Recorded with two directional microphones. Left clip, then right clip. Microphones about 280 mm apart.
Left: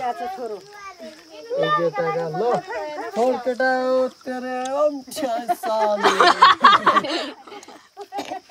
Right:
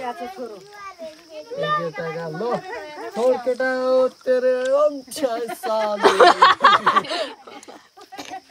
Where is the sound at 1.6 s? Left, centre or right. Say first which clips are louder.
Left 3 dB; left.